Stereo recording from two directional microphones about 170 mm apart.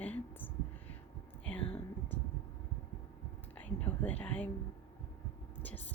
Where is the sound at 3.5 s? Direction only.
10° left (ahead or behind).